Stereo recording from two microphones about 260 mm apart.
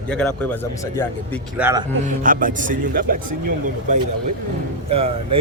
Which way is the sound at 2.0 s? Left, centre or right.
Right.